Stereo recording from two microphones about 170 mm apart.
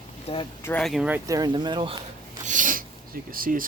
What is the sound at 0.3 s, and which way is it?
Speech, 35° left (ahead or behind).